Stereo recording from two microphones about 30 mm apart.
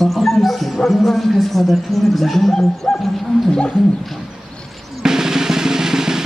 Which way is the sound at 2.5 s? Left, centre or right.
Centre.